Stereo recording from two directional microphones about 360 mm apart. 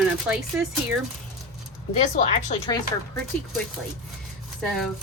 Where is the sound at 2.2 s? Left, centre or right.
Centre.